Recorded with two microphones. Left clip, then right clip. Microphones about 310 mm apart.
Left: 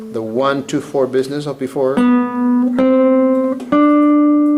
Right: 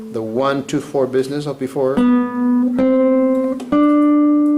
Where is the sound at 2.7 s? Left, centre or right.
Centre.